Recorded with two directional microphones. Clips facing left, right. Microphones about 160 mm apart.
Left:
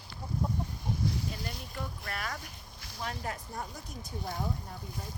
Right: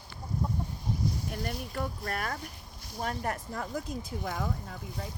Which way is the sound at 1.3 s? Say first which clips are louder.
Right 4 dB; 60° right (ahead or behind).